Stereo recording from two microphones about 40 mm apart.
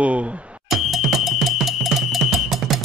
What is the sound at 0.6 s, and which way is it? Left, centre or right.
Music, centre.